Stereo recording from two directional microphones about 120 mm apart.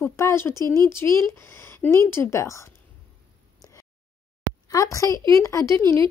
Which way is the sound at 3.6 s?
30° left (ahead or behind).